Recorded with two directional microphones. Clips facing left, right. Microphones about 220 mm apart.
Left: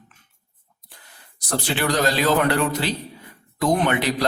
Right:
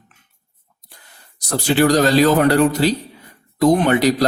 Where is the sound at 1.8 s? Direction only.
40° right (ahead or behind).